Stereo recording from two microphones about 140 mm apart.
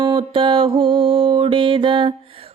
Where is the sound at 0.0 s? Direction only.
35° right (ahead or behind).